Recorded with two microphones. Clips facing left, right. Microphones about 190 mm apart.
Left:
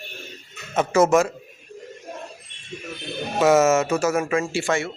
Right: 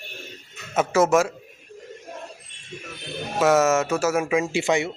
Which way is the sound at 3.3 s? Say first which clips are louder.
Left 2 dB; centre (ahead or behind).